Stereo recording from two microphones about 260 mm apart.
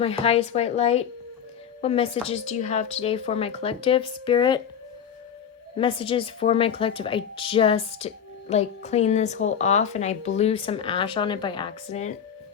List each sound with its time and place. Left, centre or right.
0.0 s a woman's voice: left
5.7 s a woman's voice: left